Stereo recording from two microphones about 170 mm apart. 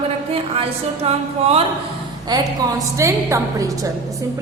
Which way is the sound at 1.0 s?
35° right (ahead or behind).